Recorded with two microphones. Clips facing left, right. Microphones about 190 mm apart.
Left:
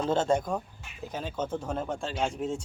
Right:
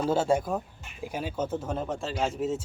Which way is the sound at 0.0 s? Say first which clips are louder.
Right 1 dB; 10° right (ahead or behind).